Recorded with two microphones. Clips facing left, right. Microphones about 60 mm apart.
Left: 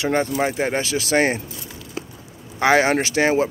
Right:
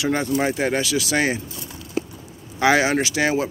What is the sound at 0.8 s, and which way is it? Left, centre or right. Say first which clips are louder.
Speech: left 2 dB; left.